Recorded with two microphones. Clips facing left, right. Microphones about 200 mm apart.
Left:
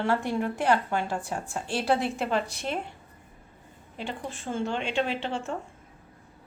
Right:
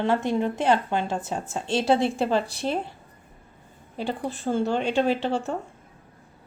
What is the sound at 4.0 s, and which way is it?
A woman's voice, 35° right (ahead or behind).